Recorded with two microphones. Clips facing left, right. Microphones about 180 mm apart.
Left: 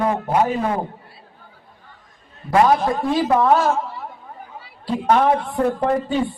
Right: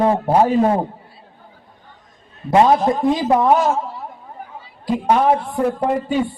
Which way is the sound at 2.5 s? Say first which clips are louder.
Right 2 dB; 25° right (ahead or behind).